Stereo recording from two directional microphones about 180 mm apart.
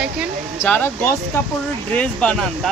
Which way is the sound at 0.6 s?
10° left (ahead or behind).